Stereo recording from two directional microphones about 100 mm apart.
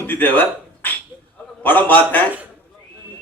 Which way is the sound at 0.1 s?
20° left (ahead or behind).